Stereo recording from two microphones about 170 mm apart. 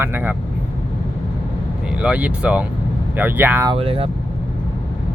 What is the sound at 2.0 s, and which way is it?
Speech, 10° right (ahead or behind).